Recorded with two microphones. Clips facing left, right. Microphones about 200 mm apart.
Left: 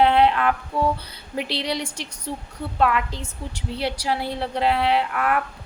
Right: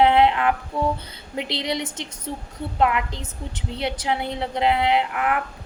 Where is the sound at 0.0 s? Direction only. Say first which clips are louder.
Right 1 dB; 20° right (ahead or behind).